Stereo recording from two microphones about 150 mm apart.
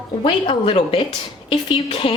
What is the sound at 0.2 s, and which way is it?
A woman's voice, 35° left (ahead or behind).